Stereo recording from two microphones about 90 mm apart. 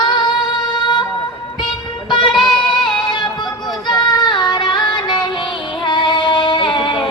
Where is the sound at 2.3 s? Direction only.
Centre (ahead or behind).